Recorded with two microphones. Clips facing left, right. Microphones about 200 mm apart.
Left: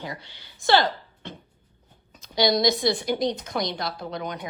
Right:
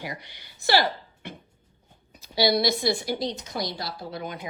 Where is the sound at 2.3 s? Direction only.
5° right (ahead or behind).